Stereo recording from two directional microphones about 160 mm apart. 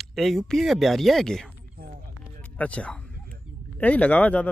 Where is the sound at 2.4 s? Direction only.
10° left (ahead or behind).